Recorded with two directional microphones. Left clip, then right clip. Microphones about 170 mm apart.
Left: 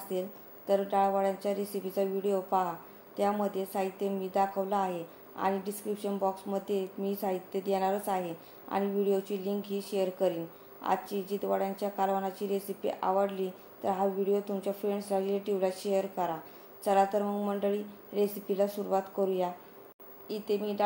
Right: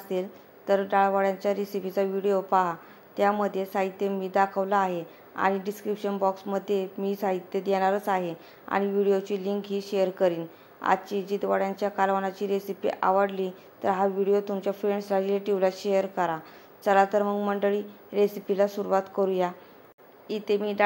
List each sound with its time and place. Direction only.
0.1 s a woman's voice: 25° right (ahead or behind)